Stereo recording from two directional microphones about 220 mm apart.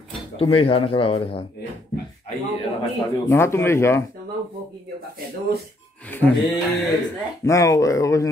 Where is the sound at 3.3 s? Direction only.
10° left (ahead or behind).